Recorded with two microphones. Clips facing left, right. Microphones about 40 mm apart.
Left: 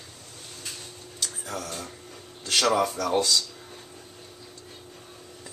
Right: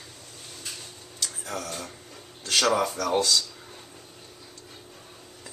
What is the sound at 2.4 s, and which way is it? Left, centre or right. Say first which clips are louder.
Speech: even; centre.